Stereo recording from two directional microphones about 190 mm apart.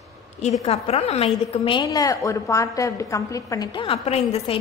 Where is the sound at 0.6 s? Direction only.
35° left (ahead or behind).